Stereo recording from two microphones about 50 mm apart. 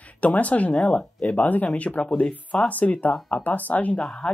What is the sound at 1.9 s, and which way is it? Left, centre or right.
Speech, centre.